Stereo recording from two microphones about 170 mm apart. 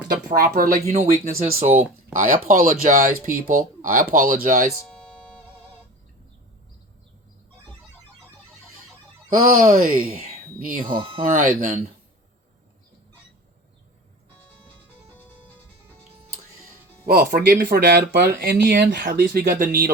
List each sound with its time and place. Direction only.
0.3 s speech: 55° right (ahead or behind)
4.9 s music: 5° left (ahead or behind)
9.3 s speech: 55° right (ahead or behind)
17.1 s speech: 65° right (ahead or behind)
18.9 s speech: 55° right (ahead or behind)